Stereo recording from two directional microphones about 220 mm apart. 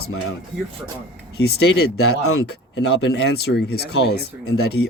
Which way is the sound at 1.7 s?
50° left (ahead or behind).